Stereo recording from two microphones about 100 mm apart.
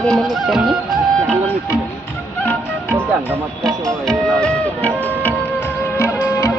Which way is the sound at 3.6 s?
35° right (ahead or behind).